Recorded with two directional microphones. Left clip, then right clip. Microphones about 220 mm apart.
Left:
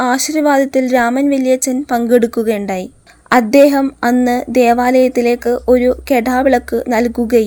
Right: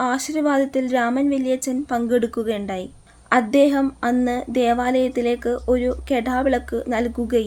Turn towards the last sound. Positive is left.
turn(degrees=30)  # may be behind; listen again after turning